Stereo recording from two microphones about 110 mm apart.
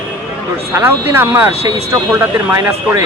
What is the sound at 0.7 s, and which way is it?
Speech, 20° right (ahead or behind).